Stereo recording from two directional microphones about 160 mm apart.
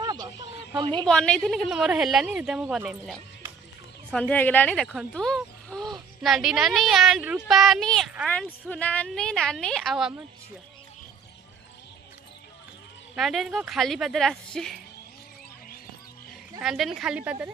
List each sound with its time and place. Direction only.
0.0 s a sound: 25° right (ahead or behind)
0.7 s a woman's voice: 30° right (ahead or behind)
1.0 s a woman's voice: 5° left (ahead or behind)
4.1 s a woman's voice: 10° left (ahead or behind)
13.1 s a woman's voice: centre (ahead or behind)
16.6 s a woman's voice: centre (ahead or behind)